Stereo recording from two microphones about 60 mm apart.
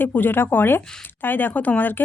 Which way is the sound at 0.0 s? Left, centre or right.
Left.